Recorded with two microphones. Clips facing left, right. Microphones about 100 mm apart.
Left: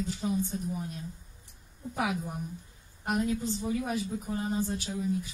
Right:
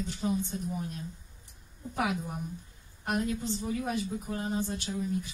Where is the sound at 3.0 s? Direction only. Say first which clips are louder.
Left 2 dB; 5° left (ahead or behind).